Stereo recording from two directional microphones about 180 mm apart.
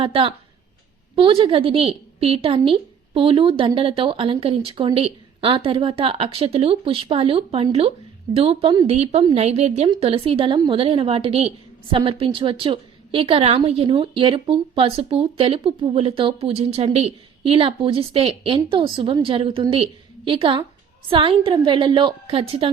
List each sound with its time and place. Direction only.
0.0 s a woman's voice: 30° right (ahead or behind)